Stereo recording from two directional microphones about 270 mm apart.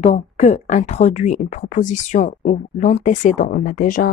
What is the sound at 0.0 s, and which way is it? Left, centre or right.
Speech, left.